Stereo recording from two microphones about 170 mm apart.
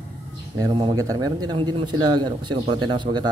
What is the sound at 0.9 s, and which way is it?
Speech, 20° right (ahead or behind).